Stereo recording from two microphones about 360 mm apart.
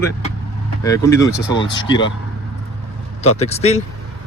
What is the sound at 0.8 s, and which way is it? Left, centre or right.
Speech, centre.